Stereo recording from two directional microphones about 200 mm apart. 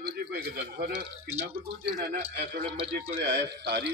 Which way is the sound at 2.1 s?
55° right (ahead or behind).